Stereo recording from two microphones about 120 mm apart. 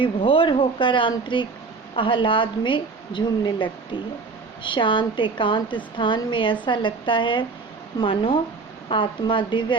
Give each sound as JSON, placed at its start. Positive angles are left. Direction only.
{"t": 0.0, "sound": "a woman's voice", "side_deg": 45}